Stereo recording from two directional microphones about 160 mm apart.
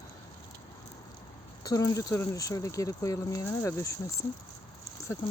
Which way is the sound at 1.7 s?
20° left (ahead or behind).